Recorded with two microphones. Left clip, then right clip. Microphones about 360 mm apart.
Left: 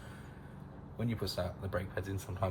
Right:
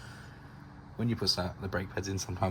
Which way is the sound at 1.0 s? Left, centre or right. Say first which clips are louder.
Right 6 dB; right.